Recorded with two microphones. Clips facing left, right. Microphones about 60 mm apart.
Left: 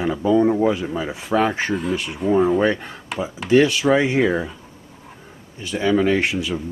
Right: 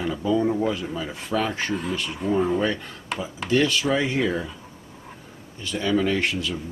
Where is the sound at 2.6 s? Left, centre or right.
Left.